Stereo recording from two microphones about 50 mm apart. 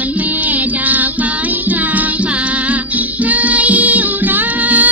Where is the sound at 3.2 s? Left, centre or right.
Right.